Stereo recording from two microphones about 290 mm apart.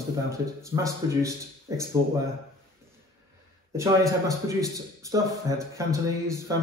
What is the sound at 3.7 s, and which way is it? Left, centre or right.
A man's voice, centre.